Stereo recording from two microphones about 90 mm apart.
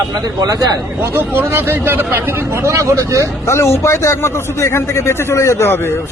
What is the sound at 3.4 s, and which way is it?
A man's voice, 30° left (ahead or behind).